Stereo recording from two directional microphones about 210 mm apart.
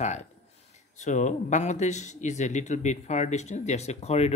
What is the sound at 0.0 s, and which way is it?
A man's voice, 35° left (ahead or behind).